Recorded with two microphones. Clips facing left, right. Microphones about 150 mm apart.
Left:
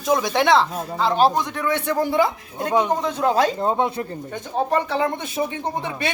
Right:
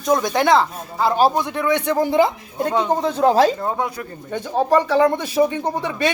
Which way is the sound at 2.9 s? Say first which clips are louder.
Right 4 dB; 30° right (ahead or behind).